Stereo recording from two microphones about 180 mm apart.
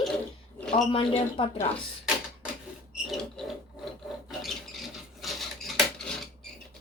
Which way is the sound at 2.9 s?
Centre (ahead or behind).